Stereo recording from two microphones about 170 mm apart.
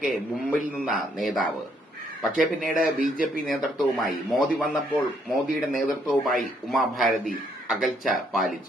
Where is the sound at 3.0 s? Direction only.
50° left (ahead or behind).